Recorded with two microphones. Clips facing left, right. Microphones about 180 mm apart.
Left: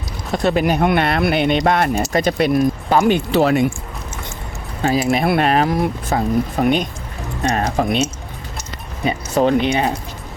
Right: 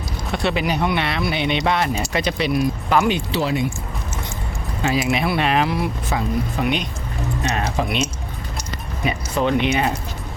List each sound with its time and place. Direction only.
0.3 s speech: 40° left (ahead or behind)
3.1 s speech: 55° left (ahead or behind)
4.8 s speech: 40° left (ahead or behind)
9.0 s speech: 40° left (ahead or behind)